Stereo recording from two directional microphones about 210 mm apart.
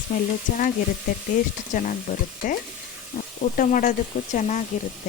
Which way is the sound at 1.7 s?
40° left (ahead or behind).